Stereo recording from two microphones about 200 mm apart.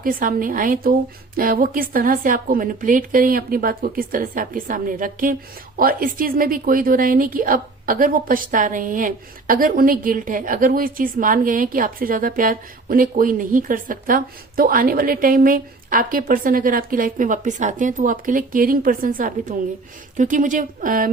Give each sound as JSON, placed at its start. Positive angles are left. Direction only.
{"t": 0.0, "sound": "a woman's voice", "side_deg": -45}